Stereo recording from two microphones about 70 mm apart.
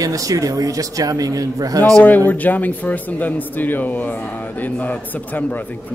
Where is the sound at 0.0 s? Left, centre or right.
Right.